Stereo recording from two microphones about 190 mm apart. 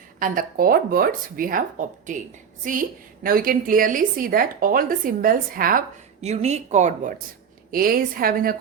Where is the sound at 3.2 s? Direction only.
50° right (ahead or behind).